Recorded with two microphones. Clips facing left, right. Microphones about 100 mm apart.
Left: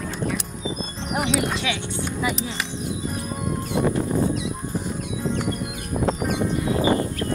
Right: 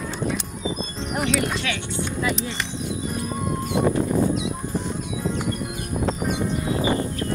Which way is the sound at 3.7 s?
20° right (ahead or behind).